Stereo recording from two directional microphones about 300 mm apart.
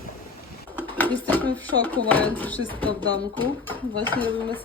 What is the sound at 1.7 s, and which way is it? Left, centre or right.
Speech, right.